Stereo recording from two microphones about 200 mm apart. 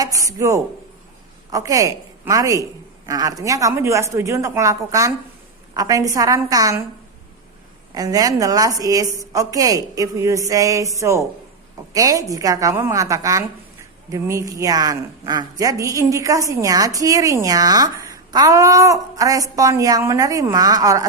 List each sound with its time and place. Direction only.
0.0 s a woman's voice: 15° right (ahead or behind)
7.9 s a woman's voice: 20° right (ahead or behind)